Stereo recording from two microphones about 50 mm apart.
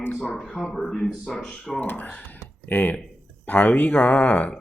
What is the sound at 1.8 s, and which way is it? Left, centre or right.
Speech, left.